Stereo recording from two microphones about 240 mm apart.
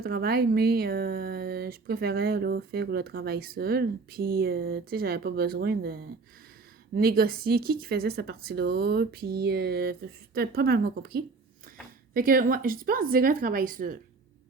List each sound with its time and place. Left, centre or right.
0.0 s speech: right